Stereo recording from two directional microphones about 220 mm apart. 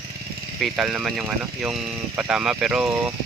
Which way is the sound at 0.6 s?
5° right (ahead or behind).